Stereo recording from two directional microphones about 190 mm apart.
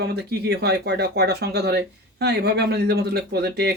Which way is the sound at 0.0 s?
60° right (ahead or behind).